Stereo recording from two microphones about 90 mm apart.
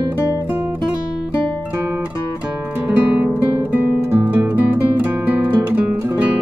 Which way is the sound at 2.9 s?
15° right (ahead or behind).